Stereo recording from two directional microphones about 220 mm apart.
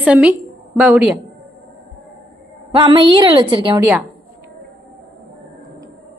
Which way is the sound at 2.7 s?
20° right (ahead or behind).